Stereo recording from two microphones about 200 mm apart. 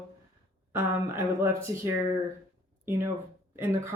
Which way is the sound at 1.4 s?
15° right (ahead or behind).